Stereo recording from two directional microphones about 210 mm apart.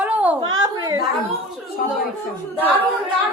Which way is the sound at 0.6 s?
15° right (ahead or behind).